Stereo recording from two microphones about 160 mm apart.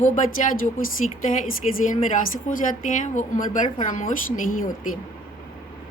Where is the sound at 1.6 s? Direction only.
45° left (ahead or behind).